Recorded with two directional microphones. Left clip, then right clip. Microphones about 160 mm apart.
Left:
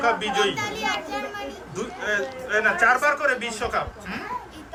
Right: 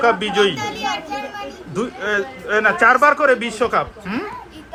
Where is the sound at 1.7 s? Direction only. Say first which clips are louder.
Right 6 dB; centre (ahead or behind).